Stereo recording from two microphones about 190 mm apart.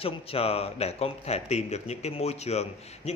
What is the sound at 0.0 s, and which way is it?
Speech, 30° left (ahead or behind).